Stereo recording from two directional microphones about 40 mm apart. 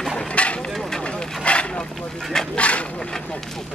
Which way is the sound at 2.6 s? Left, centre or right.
Left.